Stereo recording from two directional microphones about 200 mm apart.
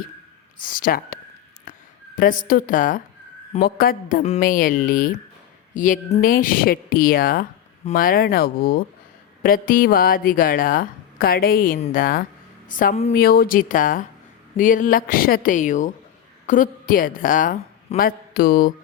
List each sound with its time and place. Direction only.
0.6 s a woman's voice: 45° left (ahead or behind)
13.1 s a woman's voice: 50° left (ahead or behind)